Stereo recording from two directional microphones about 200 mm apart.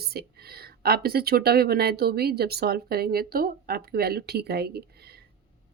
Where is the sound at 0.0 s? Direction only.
50° right (ahead or behind).